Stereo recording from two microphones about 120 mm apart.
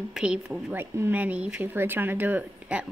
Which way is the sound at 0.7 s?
20° right (ahead or behind).